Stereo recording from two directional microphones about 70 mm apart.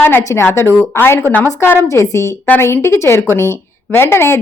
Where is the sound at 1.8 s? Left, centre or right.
Left.